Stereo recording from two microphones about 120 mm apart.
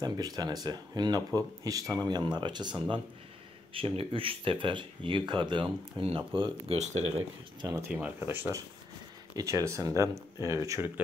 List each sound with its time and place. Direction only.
0.0 s speech: 35° right (ahead or behind)
3.7 s speech: 50° right (ahead or behind)
7.9 s speech: 15° right (ahead or behind)